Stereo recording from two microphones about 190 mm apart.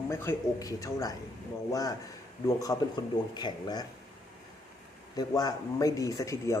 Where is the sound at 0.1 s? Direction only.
15° left (ahead or behind).